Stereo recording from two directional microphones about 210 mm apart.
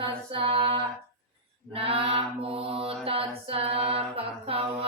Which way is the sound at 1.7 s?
25° right (ahead or behind).